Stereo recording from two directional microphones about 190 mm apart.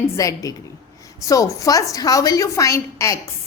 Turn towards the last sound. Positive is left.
turn(degrees=15)  # may be behind; listen again after turning